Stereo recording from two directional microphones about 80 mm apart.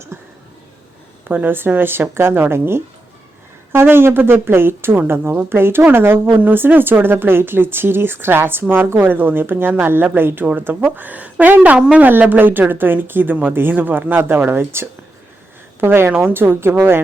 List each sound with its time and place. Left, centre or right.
0.1 s a sound: right
1.3 s speech: right
12.0 s speech: right